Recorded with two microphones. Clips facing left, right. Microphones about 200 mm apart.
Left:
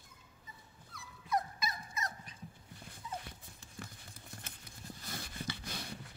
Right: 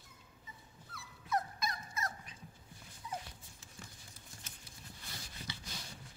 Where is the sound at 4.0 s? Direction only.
55° left (ahead or behind).